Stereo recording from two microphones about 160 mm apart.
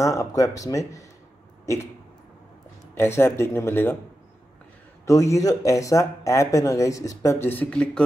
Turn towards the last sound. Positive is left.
turn(degrees=10)  # may be behind; listen again after turning